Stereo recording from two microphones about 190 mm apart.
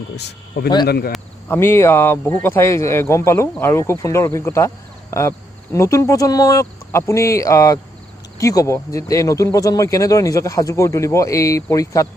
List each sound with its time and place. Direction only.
0.2 s speech: 60° left (ahead or behind)
1.5 s speech: 15° left (ahead or behind)
5.7 s speech: 15° left (ahead or behind)